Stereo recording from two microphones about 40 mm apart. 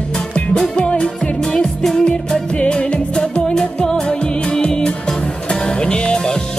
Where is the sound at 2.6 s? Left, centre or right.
Left.